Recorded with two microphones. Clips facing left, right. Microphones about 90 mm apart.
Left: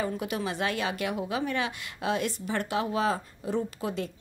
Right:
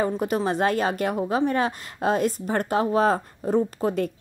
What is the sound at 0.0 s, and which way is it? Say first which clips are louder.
A woman's voice: right 7 dB; 40° right (ahead or behind).